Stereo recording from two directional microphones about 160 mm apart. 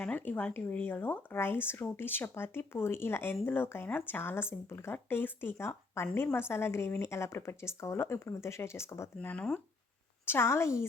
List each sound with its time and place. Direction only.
0.0 s a woman's voice: 10° left (ahead or behind)